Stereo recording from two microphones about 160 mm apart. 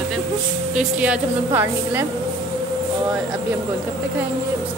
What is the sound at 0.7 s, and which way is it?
A woman's voice, 5° right (ahead or behind).